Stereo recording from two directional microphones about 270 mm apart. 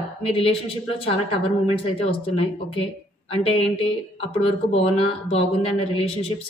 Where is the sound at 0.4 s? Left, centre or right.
Left.